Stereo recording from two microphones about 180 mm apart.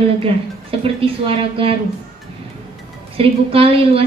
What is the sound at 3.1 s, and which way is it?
Speech, 30° right (ahead or behind).